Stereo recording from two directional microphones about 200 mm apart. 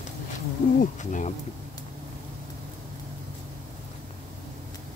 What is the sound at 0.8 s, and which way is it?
Insect, 40° left (ahead or behind).